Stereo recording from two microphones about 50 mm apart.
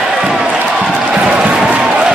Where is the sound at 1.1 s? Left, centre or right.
Right.